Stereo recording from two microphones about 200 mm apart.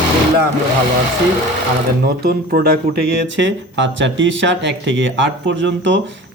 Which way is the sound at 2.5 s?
50° right (ahead or behind).